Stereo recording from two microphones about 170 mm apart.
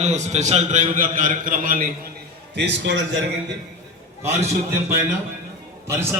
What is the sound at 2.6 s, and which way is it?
Speech, 90° right.